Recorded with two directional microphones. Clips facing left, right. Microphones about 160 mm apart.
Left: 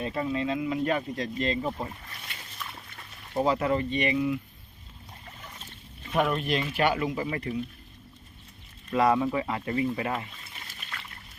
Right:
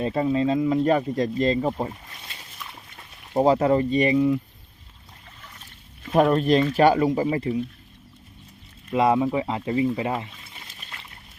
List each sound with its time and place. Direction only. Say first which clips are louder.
0.0 s speech: right 7 dB; 30° right (ahead or behind)
1.9 s speech: right 2 dB; 20° right (ahead or behind)
2.4 s a sound: left 1 dB; 10° right (ahead or behind)
3.3 s speech: right 7 dB; 35° right (ahead or behind)
6.1 s speech: right 8 dB; 40° right (ahead or behind)
8.9 s speech: right 3 dB; 20° right (ahead or behind)
10.7 s pour: left 3 dB; 20° right (ahead or behind)